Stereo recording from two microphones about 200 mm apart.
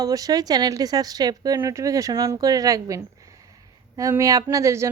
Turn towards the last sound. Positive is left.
turn(degrees=-15)  # may be behind; listen again after turning